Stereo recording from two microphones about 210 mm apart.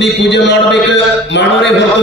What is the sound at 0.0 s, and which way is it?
A man's voice, 55° left (ahead or behind).